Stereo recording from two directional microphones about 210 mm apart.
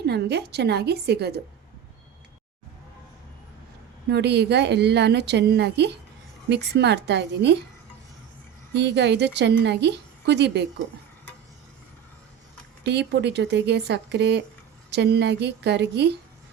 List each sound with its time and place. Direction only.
0.0 s a woman's voice: 50° right (ahead or behind)
4.1 s a woman's voice: 55° right (ahead or behind)
8.7 s a woman's voice: 55° right (ahead or behind)
12.8 s a woman's voice: 55° right (ahead or behind)